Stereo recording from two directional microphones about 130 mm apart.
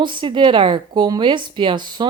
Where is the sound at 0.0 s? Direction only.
40° right (ahead or behind).